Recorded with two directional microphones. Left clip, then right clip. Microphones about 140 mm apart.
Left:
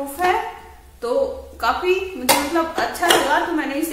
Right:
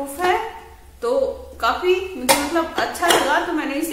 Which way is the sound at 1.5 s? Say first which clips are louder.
Even; 15° right (ahead or behind).